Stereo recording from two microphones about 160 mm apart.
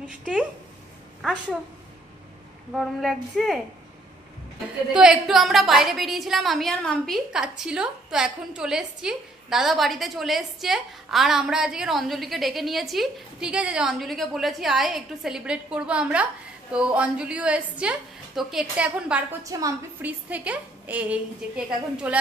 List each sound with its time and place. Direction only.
0.0 s a woman's voice: 5° right (ahead or behind)
2.7 s a woman's voice: centre (ahead or behind)
4.9 s a woman's voice: 5° right (ahead or behind)
19.4 s a woman's voice: 20° right (ahead or behind)
20.1 s a woman's voice: 10° right (ahead or behind)